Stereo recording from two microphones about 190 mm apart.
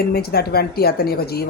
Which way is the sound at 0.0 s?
55° left (ahead or behind).